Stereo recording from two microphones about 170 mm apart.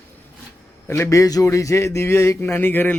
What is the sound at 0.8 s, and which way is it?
Speech, 15° left (ahead or behind).